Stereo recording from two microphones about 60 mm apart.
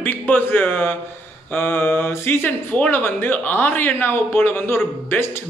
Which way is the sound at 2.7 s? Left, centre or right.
Left.